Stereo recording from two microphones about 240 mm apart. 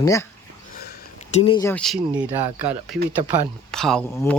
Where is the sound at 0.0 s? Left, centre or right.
Centre.